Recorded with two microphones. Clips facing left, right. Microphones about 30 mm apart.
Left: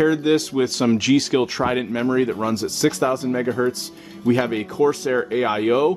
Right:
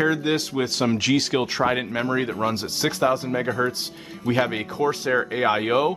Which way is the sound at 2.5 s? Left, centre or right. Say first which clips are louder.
Left 4 dB; right.